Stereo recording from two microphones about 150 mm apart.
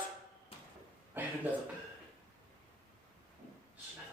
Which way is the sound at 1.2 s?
15° right (ahead or behind).